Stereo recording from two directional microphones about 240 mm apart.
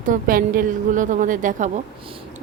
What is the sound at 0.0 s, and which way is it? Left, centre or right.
Speech, right.